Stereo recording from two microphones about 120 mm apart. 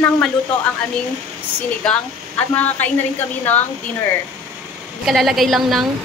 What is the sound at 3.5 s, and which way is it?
Speech, 15° left (ahead or behind).